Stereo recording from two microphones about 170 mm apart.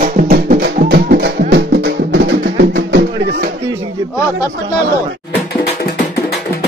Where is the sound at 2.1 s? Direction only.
85° right.